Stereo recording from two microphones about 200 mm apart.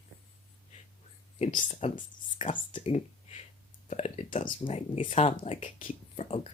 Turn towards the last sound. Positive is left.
turn(degrees=30)  # may be behind; listen again after turning